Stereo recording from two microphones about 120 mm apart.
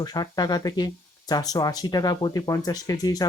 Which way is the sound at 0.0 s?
35° left (ahead or behind).